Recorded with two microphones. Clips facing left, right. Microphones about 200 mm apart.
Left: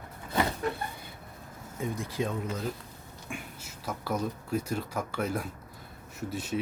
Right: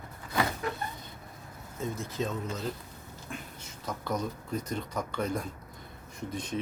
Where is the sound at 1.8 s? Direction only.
15° left (ahead or behind).